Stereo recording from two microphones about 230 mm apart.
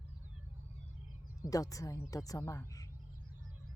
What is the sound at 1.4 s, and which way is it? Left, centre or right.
Speech, centre.